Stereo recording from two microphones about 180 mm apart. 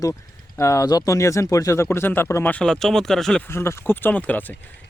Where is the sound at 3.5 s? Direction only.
15° left (ahead or behind).